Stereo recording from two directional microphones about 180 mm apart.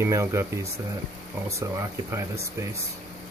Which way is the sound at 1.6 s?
15° right (ahead or behind).